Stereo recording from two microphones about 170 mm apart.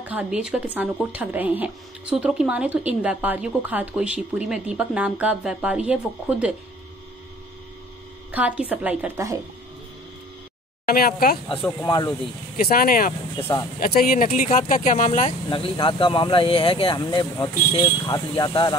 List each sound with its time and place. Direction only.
0.1 s a woman's voice: 10° right (ahead or behind)
8.3 s a woman's voice: 10° right (ahead or behind)
10.9 s speech: 60° left (ahead or behind)
11.8 s speech: 25° left (ahead or behind)
12.5 s speech: 60° left (ahead or behind); by 18.8 s 25° left (ahead or behind)